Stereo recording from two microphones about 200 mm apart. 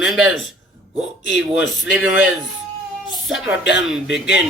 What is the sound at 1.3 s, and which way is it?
Speech, 65° left (ahead or behind).